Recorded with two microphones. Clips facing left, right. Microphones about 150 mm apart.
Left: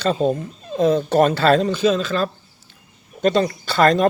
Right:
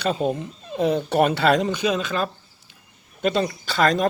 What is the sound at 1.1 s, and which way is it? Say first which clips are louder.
Speech: left 2 dB; 10° right (ahead or behind).